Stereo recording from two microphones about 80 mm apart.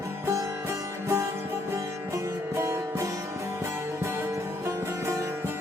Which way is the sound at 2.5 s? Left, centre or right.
Right.